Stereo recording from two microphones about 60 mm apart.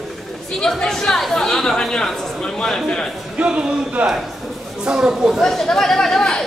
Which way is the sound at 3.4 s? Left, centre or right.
Centre.